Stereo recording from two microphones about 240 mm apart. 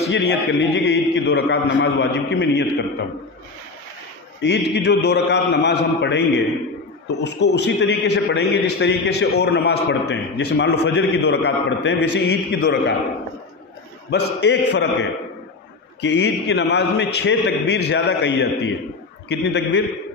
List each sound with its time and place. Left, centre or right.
0.1 s a man's voice: left
4.4 s a man's voice: left
14.1 s a man's voice: left